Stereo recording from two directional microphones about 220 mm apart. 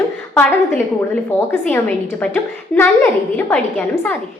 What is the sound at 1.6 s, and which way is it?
A woman's voice, 5° left (ahead or behind).